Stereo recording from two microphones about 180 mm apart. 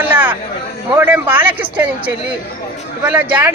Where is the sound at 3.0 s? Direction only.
10° right (ahead or behind).